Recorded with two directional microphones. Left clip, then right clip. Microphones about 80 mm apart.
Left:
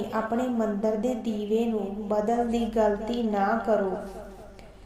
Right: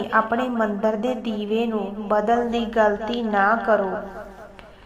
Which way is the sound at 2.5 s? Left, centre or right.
Left.